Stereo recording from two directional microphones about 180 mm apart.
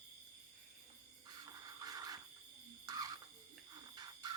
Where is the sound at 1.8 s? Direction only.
20° right (ahead or behind).